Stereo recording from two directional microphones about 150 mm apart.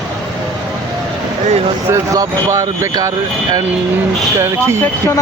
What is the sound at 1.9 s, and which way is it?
Speech, 20° right (ahead or behind).